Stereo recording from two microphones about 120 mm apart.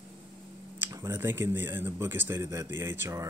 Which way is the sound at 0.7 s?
20° right (ahead or behind).